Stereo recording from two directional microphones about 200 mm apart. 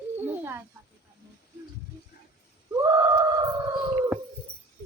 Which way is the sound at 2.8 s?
15° right (ahead or behind).